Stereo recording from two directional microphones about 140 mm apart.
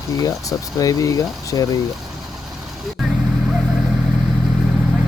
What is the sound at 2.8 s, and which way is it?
Vehicle, centre (ahead or behind).